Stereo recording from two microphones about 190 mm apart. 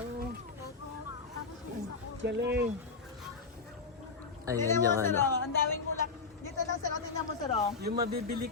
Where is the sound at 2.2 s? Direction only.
65° right (ahead or behind).